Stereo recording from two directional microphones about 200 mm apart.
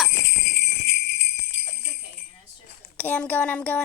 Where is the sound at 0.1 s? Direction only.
55° left (ahead or behind).